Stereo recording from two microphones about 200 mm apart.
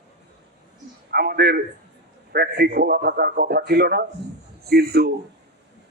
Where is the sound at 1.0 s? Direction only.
50° right (ahead or behind).